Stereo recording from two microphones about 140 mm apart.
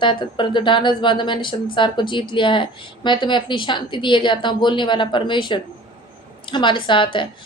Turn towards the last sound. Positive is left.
turn(degrees=35)  # may be behind; listen again after turning